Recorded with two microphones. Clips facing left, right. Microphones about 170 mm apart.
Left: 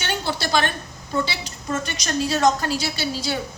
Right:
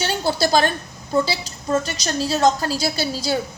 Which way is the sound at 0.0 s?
35° right (ahead or behind).